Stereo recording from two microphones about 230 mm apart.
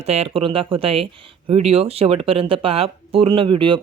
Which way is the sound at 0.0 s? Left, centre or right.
Right.